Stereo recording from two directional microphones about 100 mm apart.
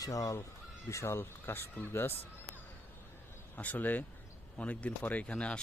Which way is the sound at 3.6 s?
15° left (ahead or behind).